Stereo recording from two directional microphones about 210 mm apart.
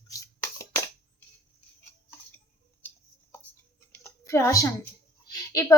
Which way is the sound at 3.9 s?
15° left (ahead or behind).